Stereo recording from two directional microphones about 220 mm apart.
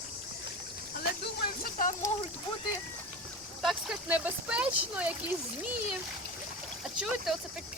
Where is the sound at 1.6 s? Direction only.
40° left (ahead or behind).